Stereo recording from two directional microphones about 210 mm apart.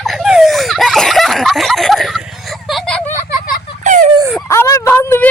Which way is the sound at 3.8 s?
35° right (ahead or behind).